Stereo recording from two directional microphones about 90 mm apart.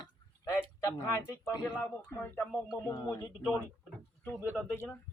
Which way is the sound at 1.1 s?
35° left (ahead or behind).